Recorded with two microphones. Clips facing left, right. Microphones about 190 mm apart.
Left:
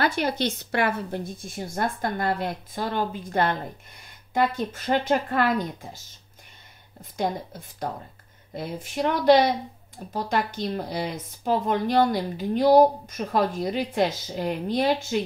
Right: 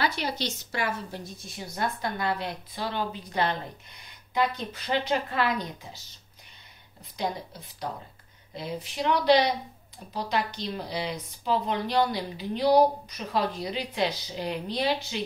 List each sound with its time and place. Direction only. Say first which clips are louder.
0.0 s speech: left 5 dB; 50° left (ahead or behind)
7.2 s speech: left 4 dB; 50° left (ahead or behind)